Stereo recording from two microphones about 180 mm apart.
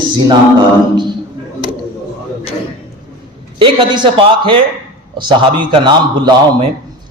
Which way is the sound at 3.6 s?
25° right (ahead or behind).